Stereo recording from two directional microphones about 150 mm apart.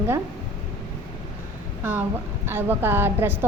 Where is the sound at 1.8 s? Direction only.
15° right (ahead or behind).